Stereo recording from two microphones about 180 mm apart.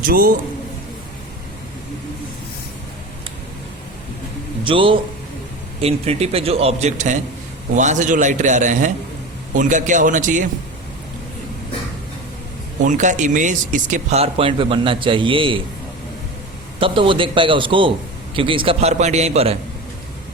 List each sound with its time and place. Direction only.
0.1 s a man's voice: 55° right (ahead or behind)
4.6 s a man's voice: 30° right (ahead or behind); by 10.4 s 45° right (ahead or behind)
12.8 s speech: 45° right (ahead or behind)
16.8 s a man's voice: 30° right (ahead or behind)